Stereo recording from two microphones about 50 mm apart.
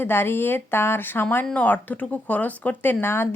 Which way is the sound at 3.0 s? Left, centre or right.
Left.